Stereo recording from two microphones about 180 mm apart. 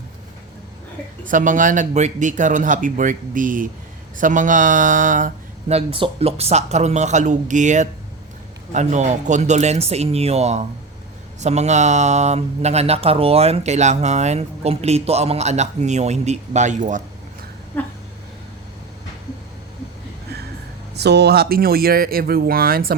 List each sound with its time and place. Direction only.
1.3 s speech: 45° right (ahead or behind)
20.9 s speech: 65° right (ahead or behind)